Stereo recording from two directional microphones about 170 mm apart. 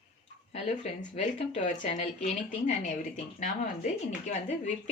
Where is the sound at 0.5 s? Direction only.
40° left (ahead or behind).